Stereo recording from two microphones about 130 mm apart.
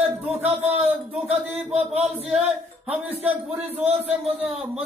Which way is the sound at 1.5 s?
10° right (ahead or behind).